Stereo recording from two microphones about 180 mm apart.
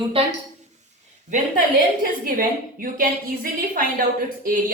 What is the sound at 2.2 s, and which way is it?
A woman's voice, 50° right (ahead or behind).